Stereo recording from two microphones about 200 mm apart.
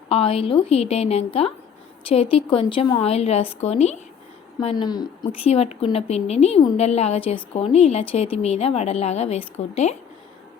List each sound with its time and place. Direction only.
0.1 s a woman's voice: 30° left (ahead or behind)
4.6 s a woman's voice: 20° left (ahead or behind)
5.5 s a woman's voice: 30° left (ahead or behind)